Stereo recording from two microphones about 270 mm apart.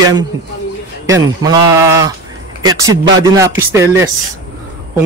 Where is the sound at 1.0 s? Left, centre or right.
Centre.